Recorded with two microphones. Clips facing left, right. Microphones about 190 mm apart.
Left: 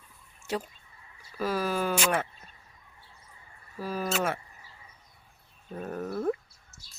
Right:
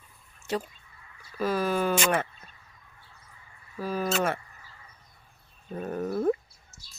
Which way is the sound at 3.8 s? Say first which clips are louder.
Right 2 dB; 10° left (ahead or behind).